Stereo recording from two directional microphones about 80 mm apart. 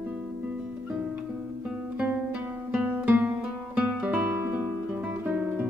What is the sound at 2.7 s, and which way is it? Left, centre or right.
Guitar, centre.